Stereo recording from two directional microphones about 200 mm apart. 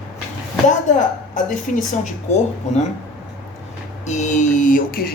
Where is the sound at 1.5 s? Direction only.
40° left (ahead or behind).